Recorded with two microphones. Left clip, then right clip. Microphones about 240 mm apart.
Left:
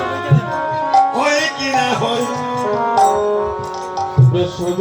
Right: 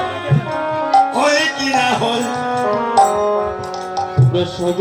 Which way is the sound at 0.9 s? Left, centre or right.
Right.